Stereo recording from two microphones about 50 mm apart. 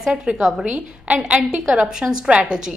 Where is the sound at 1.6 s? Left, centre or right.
Centre.